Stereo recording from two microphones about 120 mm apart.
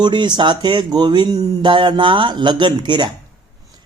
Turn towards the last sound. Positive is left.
turn(degrees=-40)  # may be behind; listen again after turning